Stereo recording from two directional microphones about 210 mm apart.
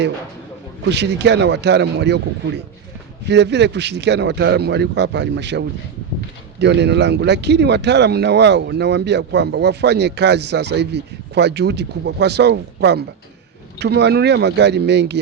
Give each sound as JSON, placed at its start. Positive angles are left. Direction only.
{"t": 0.8, "sound": "a man's voice", "side_deg": -55}
{"t": 3.2, "sound": "a man's voice", "side_deg": -55}